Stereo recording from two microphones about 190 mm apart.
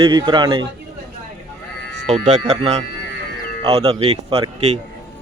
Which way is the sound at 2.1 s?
35° right (ahead or behind).